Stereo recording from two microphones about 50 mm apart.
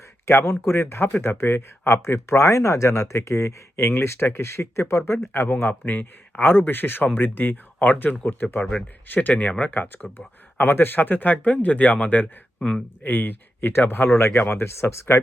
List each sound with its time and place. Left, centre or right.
0.3 s speech: left
3.9 s speech: left
5.6 s speech: left